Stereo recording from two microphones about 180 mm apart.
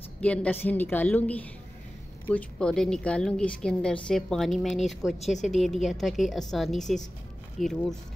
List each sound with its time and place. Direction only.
0.2 s a woman's voice: 5° left (ahead or behind)
5.2 s speech: 40° left (ahead or behind)
5.6 s a woman's voice: centre (ahead or behind)